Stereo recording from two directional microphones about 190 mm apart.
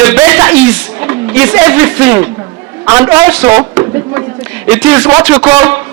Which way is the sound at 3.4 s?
15° right (ahead or behind).